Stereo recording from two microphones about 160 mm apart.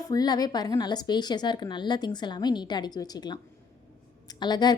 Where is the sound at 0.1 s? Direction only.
25° left (ahead or behind).